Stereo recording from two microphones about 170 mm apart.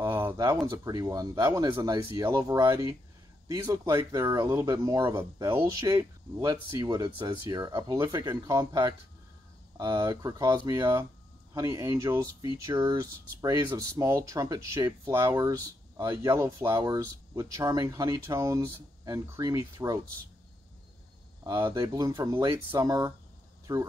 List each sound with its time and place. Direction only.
0.0 s a sound: 15° right (ahead or behind)
0.7 s speech: 20° right (ahead or behind)
21.5 s speech: 20° right (ahead or behind)